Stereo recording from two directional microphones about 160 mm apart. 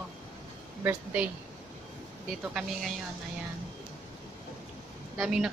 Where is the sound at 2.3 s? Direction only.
Centre (ahead or behind).